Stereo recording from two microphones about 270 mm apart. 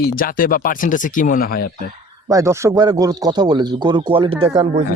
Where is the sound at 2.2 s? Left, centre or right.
Centre.